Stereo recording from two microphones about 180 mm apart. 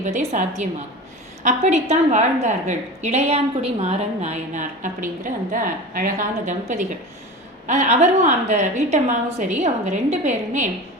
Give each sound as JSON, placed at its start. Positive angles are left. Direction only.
{"t": 0.0, "sound": "a woman's voice", "side_deg": -45}
{"t": 7.7, "sound": "a woman's voice", "side_deg": -40}